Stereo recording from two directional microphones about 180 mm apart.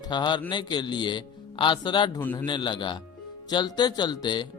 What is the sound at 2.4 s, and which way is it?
A man's voice, 25° left (ahead or behind).